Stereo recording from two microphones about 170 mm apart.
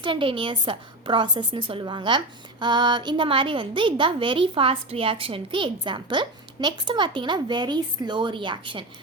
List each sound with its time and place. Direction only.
0.0 s a woman's voice: 30° right (ahead or behind)